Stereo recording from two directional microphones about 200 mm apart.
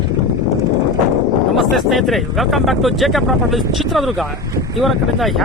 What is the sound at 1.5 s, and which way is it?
Speech, centre (ahead or behind).